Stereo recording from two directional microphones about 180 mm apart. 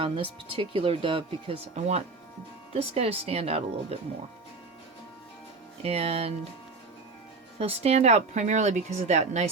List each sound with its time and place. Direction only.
0.0 s speech: 30° right (ahead or behind)
5.8 s speech: 35° right (ahead or behind)
7.6 s speech: 35° right (ahead or behind)